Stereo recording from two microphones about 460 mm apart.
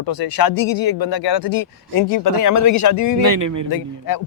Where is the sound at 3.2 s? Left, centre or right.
Right.